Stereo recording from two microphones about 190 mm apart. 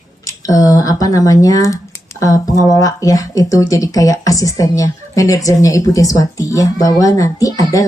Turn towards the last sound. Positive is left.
turn(degrees=20)  # may be behind; listen again after turning